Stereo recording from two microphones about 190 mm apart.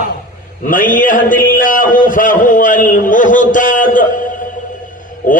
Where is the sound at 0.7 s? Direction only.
45° left (ahead or behind).